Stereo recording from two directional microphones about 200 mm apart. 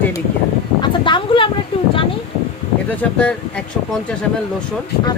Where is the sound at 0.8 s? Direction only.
25° left (ahead or behind).